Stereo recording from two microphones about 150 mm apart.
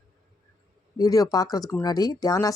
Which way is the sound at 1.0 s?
25° left (ahead or behind).